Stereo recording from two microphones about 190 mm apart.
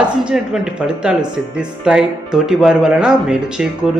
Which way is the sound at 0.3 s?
5° right (ahead or behind).